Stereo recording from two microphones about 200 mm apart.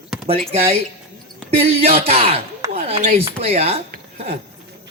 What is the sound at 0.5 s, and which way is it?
Speech, 30° right (ahead or behind).